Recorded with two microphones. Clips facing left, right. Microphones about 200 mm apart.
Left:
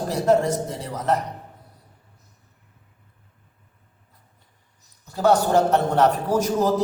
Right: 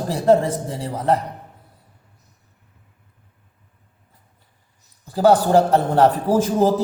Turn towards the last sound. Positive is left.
turn(degrees=-30)  # may be behind; listen again after turning